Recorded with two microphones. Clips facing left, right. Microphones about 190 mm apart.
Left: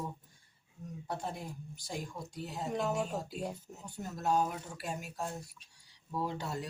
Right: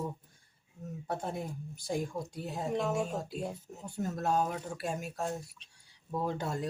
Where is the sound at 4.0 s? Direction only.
55° right (ahead or behind).